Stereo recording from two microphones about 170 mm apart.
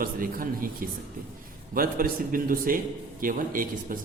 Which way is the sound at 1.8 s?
55° right (ahead or behind).